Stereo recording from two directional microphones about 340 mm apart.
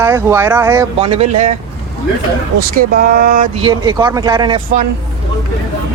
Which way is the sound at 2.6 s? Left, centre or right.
Right.